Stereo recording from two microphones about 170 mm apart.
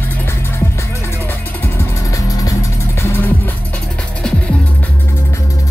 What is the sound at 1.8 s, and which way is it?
Music, 20° left (ahead or behind).